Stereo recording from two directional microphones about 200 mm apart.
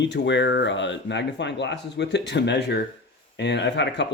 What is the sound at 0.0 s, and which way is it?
Speech, 65° left (ahead or behind).